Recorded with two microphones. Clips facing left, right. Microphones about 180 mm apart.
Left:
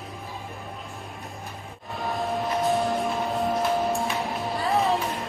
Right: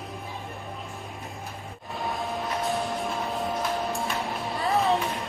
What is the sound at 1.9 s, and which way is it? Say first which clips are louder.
Music: left 3 dB; centre (ahead or behind).